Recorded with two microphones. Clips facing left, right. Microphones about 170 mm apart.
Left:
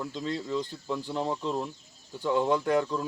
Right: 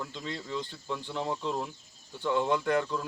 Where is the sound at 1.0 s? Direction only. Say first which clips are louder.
Left 4 dB; 40° left (ahead or behind).